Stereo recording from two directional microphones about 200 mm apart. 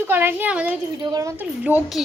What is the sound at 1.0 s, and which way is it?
Speech, 20° right (ahead or behind).